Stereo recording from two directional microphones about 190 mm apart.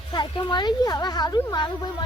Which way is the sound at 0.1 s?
25° left (ahead or behind).